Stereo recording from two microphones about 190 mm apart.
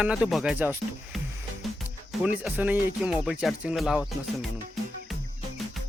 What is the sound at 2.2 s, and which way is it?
Speech, 5° right (ahead or behind).